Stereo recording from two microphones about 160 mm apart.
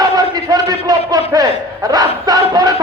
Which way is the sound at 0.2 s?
25° right (ahead or behind).